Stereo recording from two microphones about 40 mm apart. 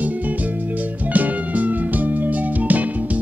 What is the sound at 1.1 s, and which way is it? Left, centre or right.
Music, right.